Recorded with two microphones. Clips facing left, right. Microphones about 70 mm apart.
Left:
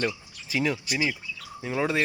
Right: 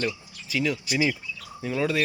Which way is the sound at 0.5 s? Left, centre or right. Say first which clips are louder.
Even; left.